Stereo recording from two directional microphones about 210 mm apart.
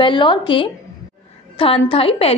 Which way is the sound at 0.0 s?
25° left (ahead or behind).